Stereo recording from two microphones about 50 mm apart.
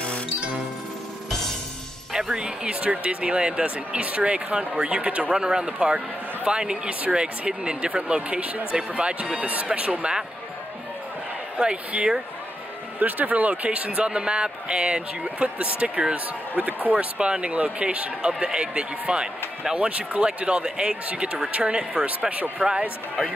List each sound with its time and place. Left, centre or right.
2.1 s speech: centre
5.3 s speech: centre
11.5 s speech: centre
13.0 s speech: right
22.6 s speech: centre